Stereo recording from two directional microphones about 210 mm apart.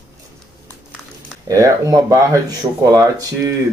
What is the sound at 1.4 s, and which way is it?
Speech, 15° right (ahead or behind).